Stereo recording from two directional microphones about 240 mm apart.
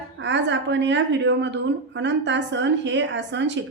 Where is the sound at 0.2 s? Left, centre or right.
Right.